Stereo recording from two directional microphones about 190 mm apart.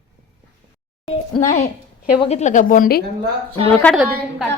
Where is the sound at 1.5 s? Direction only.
50° left (ahead or behind).